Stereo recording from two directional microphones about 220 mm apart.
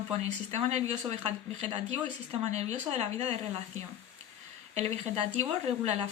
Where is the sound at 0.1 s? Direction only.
30° right (ahead or behind).